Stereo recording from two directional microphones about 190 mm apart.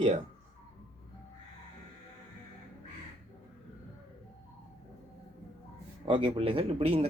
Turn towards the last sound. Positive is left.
turn(degrees=-30)  # may be behind; listen again after turning